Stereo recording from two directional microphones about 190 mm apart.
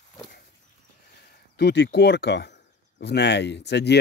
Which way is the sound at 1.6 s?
60° left (ahead or behind).